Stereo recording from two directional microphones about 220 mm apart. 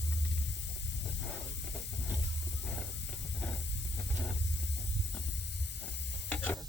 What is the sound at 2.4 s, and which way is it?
Hiss, 50° left (ahead or behind).